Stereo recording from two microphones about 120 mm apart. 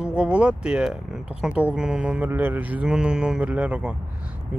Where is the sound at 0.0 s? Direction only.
10° right (ahead or behind).